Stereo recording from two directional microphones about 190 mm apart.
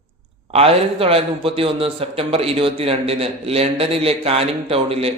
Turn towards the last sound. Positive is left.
turn(degrees=-30)  # may be behind; listen again after turning